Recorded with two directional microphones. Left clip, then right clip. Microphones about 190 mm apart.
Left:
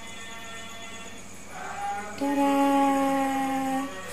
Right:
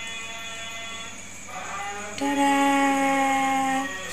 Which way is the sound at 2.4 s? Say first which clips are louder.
Right 2 dB; 10° right (ahead or behind).